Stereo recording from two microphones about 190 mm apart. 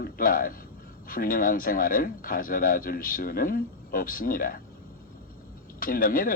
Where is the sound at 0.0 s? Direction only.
50° left (ahead or behind).